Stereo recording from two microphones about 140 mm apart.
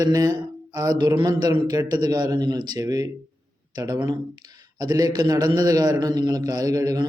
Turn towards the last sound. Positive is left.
turn(degrees=-25)  # may be behind; listen again after turning